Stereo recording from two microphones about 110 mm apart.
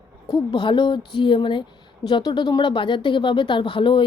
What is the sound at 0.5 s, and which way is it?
A woman's voice, 45° left (ahead or behind).